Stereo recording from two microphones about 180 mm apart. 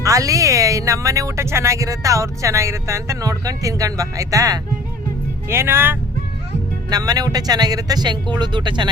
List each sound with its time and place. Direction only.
0.0 s speech: 20° right (ahead or behind)